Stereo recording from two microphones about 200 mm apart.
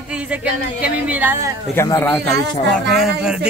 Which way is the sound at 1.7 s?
10° left (ahead or behind).